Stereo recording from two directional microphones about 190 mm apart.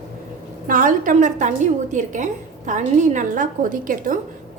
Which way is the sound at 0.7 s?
45° right (ahead or behind).